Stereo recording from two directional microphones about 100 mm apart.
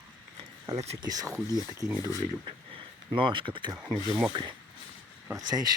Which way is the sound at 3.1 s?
55° right (ahead or behind).